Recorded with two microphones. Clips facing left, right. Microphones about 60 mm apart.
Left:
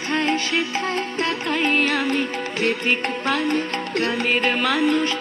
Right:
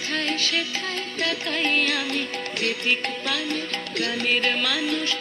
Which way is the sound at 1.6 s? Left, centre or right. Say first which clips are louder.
Left 4 dB; centre.